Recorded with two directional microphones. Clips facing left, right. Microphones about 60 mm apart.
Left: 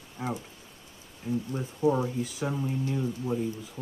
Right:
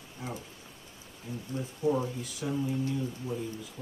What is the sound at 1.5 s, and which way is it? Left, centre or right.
Speech, left.